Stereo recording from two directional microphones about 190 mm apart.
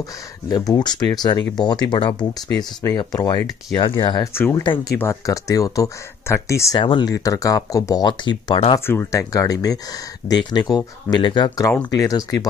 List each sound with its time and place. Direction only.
0.5 s speech: 20° left (ahead or behind)
4.6 s speech: 25° left (ahead or behind)
4.9 s speech: 15° left (ahead or behind)
6.8 s speech: 25° left (ahead or behind)
8.7 s speech: 15° left (ahead or behind)